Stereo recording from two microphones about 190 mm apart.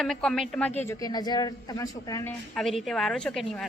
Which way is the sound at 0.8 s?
15° left (ahead or behind).